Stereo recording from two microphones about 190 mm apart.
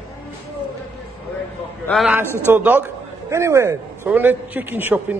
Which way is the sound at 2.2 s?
10° left (ahead or behind).